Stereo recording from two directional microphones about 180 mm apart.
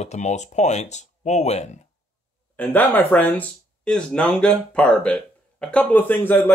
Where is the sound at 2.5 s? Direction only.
10° left (ahead or behind).